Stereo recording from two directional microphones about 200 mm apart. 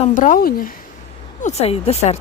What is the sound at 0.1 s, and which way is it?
Speech, 40° left (ahead or behind).